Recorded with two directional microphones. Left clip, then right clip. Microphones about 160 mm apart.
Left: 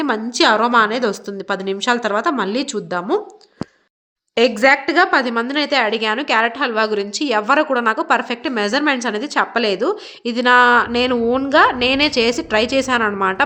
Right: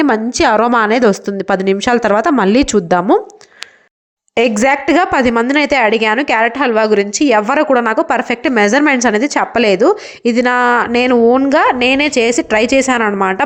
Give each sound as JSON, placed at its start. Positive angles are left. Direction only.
{"t": 0.0, "sound": "a woman's voice", "side_deg": -40}
{"t": 4.4, "sound": "a woman's voice", "side_deg": -45}